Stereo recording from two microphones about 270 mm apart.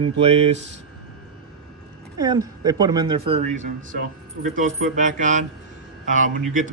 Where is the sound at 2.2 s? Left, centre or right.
Centre.